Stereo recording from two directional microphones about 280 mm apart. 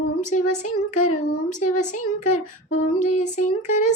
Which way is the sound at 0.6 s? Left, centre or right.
Left.